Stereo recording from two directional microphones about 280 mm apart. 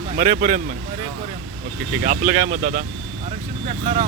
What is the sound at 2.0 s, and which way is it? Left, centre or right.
Speech, right.